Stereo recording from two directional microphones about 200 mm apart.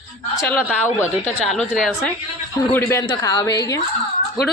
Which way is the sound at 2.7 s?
15° left (ahead or behind).